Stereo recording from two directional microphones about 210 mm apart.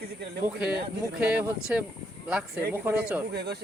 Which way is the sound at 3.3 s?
50° right (ahead or behind).